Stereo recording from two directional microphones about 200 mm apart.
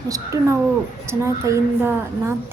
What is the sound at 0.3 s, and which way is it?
A woman's voice, 15° right (ahead or behind).